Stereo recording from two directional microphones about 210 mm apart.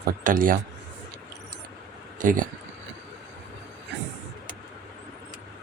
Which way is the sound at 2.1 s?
40° right (ahead or behind).